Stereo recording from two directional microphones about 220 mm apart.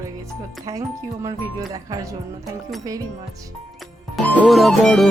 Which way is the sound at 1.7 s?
15° right (ahead or behind).